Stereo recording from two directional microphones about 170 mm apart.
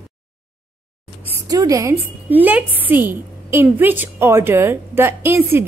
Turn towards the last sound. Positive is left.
turn(degrees=-15)  # may be behind; listen again after turning